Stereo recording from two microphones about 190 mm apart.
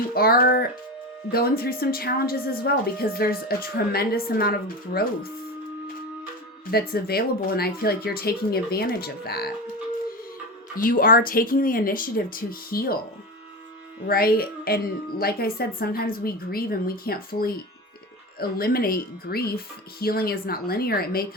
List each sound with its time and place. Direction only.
0.1 s a woman's voice: 50° left (ahead or behind)
6.7 s a woman's voice: 55° left (ahead or behind)
10.8 s a woman's voice: 50° left (ahead or behind)
14.1 s a woman's voice: 50° left (ahead or behind)